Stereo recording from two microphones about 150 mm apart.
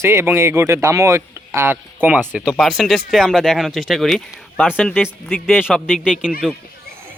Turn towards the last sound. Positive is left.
turn(degrees=-5)  # may be behind; listen again after turning